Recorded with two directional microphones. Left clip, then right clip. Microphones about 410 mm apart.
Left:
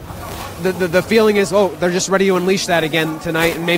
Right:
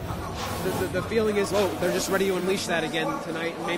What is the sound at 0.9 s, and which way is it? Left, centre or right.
Speech, left.